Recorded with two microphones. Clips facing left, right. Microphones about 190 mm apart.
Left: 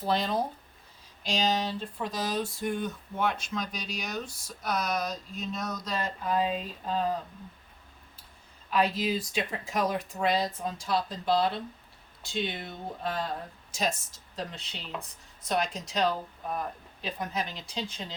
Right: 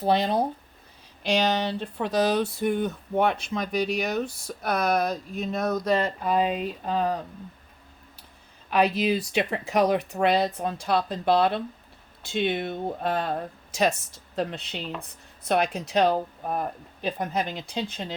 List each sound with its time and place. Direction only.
0.0 s speech: 65° right (ahead or behind)
8.7 s speech: 70° right (ahead or behind)